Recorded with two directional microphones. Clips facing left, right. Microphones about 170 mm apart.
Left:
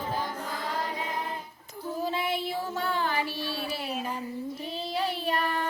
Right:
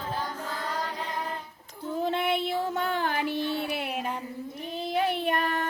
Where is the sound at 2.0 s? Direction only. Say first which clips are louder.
Right 4 dB; 60° right (ahead or behind).